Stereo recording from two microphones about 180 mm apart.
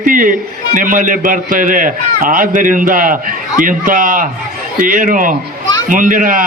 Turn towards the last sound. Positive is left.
turn(degrees=-50)  # may be behind; listen again after turning